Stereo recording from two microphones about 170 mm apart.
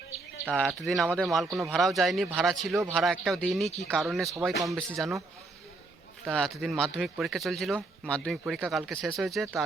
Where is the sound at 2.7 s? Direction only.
20° right (ahead or behind).